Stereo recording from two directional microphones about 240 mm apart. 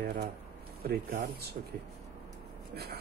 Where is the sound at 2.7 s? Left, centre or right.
Right.